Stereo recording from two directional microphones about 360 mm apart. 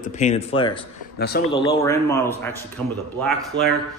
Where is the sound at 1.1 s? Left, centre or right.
Left.